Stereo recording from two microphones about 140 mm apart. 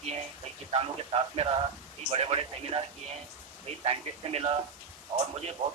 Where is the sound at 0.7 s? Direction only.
40° right (ahead or behind).